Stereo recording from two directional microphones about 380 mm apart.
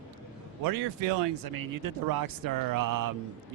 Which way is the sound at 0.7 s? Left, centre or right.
Right.